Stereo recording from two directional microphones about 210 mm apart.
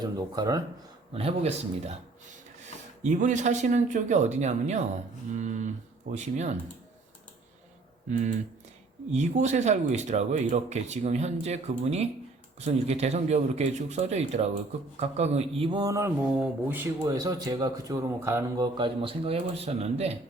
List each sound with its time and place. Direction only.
0.0 s speech: 20° right (ahead or behind)
1.1 s speech: 30° right (ahead or behind)
3.0 s speech: 35° right (ahead or behind)
9.1 s speech: 35° right (ahead or behind)